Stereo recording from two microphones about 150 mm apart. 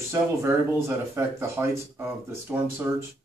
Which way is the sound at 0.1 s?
20° right (ahead or behind).